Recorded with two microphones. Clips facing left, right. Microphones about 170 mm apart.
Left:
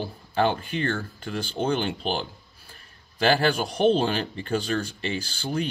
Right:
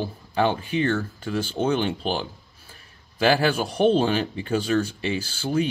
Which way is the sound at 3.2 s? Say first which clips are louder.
Right 1 dB; 5° right (ahead or behind).